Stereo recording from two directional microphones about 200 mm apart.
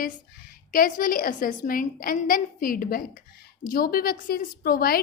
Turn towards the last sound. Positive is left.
turn(degrees=45)  # may be behind; listen again after turning